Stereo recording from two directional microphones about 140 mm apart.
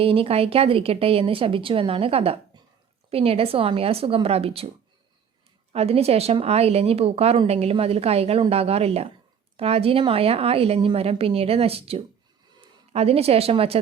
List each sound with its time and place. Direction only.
0.0 s a woman's voice: 40° right (ahead or behind)
5.7 s a woman's voice: 45° right (ahead or behind)